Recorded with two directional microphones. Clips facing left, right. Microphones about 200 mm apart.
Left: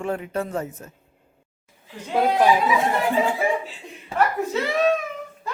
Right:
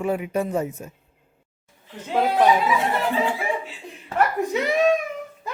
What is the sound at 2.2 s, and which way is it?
Speech, 10° left (ahead or behind).